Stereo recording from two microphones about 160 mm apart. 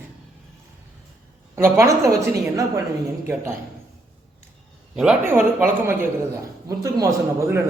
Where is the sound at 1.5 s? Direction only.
15° right (ahead or behind).